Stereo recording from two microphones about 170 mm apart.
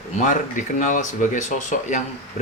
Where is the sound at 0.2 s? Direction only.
50° left (ahead or behind).